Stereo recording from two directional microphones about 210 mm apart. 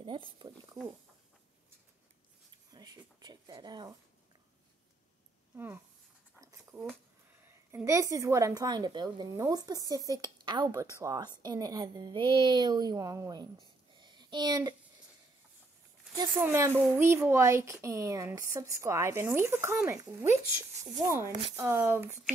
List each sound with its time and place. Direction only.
0.0 s speech: 25° right (ahead or behind)
2.7 s speech: 20° right (ahead or behind)
6.4 s a sound: 10° right (ahead or behind)
7.4 s a woman's voice: 10° right (ahead or behind)
13.9 s a sound: 20° right (ahead or behind)
16.2 s a woman's voice: 10° right (ahead or behind)
21.5 s a woman's voice: 10° right (ahead or behind)